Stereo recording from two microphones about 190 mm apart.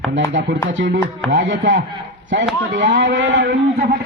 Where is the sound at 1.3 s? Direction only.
75° right (ahead or behind).